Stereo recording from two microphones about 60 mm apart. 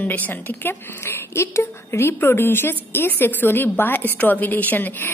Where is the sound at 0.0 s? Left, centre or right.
Left.